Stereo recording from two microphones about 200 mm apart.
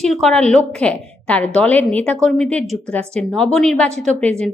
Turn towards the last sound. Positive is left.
turn(degrees=5)  # may be behind; listen again after turning